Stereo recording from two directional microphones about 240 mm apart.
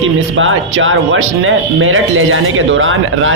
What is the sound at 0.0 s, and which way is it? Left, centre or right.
Speech, right.